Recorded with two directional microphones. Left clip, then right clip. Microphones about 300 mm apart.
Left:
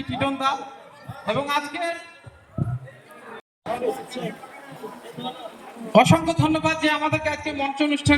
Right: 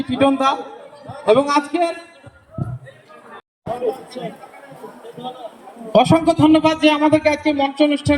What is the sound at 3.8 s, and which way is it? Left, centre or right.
Speech, right.